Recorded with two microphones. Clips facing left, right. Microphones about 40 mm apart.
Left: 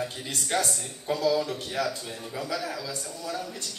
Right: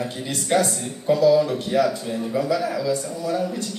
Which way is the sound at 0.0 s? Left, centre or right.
Right.